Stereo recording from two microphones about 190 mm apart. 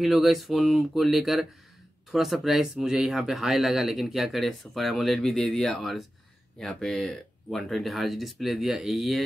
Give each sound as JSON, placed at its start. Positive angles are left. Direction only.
{"t": 0.0, "sound": "speech", "side_deg": 0}